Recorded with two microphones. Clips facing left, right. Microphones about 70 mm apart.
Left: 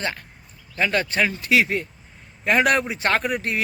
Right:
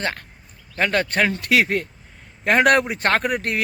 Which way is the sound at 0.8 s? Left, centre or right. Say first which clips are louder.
Right 2 dB; right.